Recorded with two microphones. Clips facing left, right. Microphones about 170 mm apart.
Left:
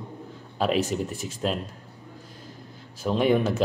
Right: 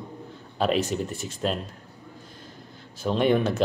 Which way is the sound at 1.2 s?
Centre (ahead or behind).